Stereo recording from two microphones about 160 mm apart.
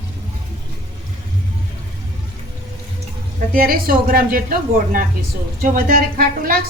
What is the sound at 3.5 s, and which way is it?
Speech, 65° right (ahead or behind).